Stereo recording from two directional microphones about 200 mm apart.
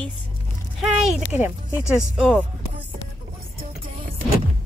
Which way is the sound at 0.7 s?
Centre (ahead or behind).